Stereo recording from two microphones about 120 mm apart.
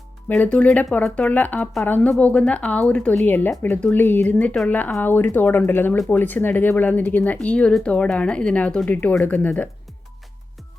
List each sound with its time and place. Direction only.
0.3 s speech: 10° left (ahead or behind)